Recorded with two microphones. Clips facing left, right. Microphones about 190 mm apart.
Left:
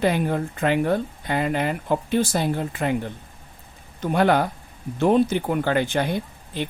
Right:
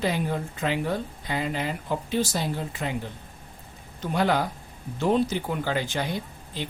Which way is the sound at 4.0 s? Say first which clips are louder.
Left 5 dB; 55° left (ahead or behind).